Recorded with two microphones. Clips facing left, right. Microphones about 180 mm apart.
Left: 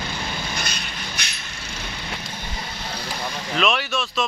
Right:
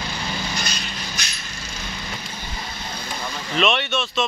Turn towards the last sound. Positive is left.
turn(degrees=0)  # may be behind; listen again after turning